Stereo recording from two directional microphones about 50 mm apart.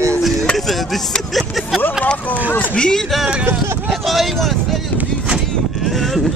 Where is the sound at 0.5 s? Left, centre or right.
Centre.